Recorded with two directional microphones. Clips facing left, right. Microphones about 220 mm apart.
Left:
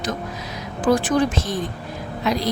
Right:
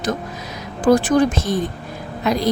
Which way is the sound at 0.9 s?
40° right (ahead or behind).